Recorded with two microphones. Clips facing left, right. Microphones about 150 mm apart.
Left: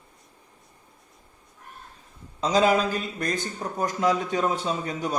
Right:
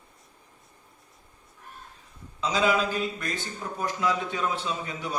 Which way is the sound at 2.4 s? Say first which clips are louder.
Left 4 dB; 45° left (ahead or behind).